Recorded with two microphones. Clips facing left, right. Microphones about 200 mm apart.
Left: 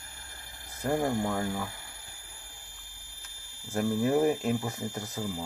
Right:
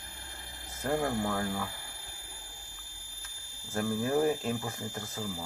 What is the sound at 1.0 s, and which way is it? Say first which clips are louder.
Speech: left 2 dB; 20° left (ahead or behind).